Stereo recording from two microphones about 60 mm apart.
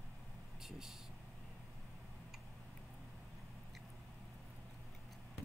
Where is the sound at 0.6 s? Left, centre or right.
Centre.